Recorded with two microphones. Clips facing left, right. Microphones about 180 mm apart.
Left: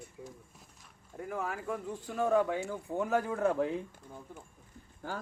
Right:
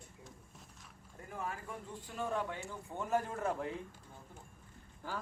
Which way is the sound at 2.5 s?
85° left.